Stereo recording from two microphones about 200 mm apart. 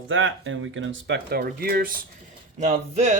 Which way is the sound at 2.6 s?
35° right (ahead or behind).